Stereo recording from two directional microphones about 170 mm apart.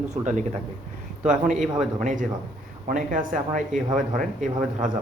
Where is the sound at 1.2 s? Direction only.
50° right (ahead or behind).